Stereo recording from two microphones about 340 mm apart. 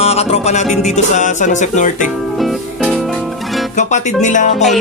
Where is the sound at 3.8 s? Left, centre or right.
Left.